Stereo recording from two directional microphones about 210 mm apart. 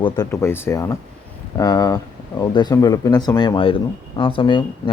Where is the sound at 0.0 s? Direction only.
15° left (ahead or behind).